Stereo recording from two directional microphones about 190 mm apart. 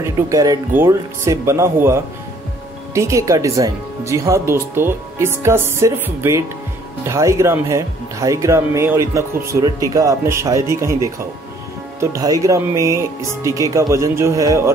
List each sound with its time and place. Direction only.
0.0 s speech: 15° right (ahead or behind)